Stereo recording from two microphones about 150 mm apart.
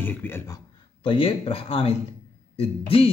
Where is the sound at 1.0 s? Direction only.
35° left (ahead or behind).